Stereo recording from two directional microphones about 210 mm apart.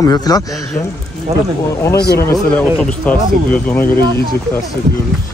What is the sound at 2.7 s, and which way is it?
Speech, centre (ahead or behind).